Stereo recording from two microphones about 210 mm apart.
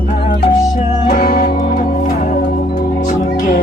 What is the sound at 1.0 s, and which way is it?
Music, 40° left (ahead or behind).